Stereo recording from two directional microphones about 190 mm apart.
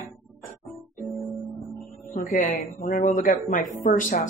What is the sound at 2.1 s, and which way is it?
Speech, 45° left (ahead or behind).